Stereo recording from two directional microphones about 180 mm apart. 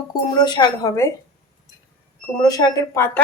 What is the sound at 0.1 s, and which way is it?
A woman's voice, 25° left (ahead or behind).